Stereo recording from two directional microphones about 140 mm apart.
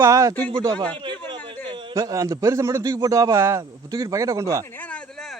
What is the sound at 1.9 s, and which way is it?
A man's voice, 25° right (ahead or behind).